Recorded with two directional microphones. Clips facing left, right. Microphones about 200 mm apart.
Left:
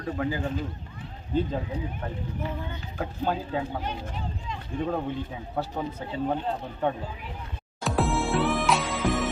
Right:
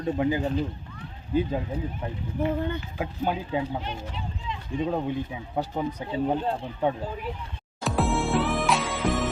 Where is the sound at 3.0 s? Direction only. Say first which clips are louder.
Left 2 dB; 15° right (ahead or behind).